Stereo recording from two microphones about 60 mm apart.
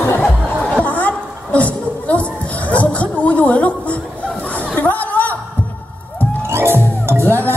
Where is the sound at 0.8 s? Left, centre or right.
Left.